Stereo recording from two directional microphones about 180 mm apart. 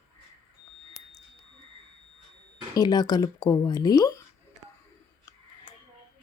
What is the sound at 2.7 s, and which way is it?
Speech, 20° left (ahead or behind).